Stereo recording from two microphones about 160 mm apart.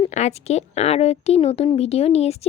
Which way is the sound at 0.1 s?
45° left (ahead or behind).